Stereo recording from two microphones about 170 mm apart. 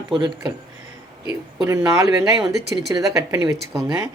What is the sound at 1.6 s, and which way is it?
A woman's voice, 20° right (ahead or behind).